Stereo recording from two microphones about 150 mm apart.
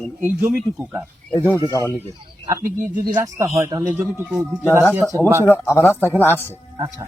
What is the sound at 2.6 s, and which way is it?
Speech, 70° right (ahead or behind).